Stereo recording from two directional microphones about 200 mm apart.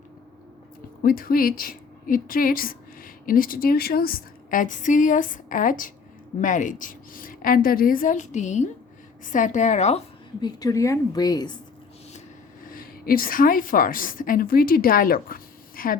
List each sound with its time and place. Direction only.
1.0 s a woman's voice: 45° left (ahead or behind)
10.4 s a woman's voice: 15° left (ahead or behind)
12.7 s a woman's voice: 45° left (ahead or behind)